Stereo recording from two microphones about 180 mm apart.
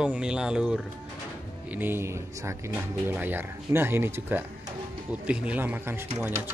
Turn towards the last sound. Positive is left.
turn(degrees=-10)  # may be behind; listen again after turning